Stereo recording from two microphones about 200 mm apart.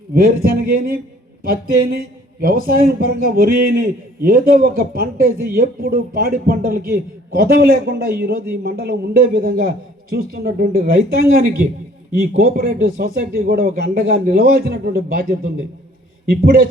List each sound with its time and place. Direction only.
0.5 s a man's voice: 45° right (ahead or behind)
12.5 s a man's voice: 50° right (ahead or behind)
16.4 s a man's voice: 50° right (ahead or behind)